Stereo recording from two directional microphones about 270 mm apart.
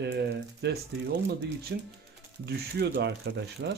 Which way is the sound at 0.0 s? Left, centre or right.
Right.